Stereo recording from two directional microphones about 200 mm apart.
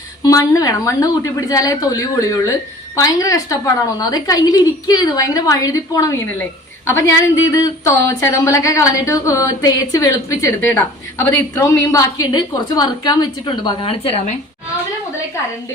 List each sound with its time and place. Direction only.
0.3 s a woman's voice: 15° left (ahead or behind)
7.5 s a woman's voice: 15° left (ahead or behind)